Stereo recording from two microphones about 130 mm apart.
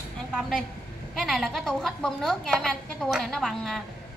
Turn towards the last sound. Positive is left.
turn(degrees=0)  # may be behind; listen again after turning